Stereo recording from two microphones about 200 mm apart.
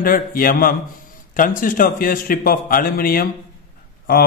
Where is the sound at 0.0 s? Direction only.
45° left (ahead or behind).